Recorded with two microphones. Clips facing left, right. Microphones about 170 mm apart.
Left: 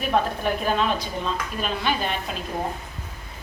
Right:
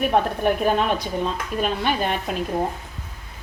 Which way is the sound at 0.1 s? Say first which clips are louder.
Right 3 dB; 55° right (ahead or behind).